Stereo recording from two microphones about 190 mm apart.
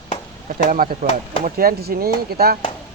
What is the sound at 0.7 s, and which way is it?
Speech, 50° right (ahead or behind).